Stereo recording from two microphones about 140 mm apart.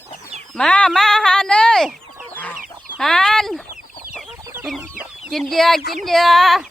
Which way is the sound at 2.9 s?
5° left (ahead or behind).